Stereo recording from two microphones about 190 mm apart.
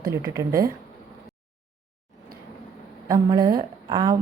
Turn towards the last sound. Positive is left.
turn(degrees=-20)  # may be behind; listen again after turning